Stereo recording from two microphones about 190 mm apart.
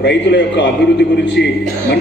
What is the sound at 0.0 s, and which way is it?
A man's voice, 65° left (ahead or behind).